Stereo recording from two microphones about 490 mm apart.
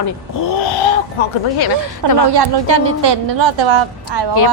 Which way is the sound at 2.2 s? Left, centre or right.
Right.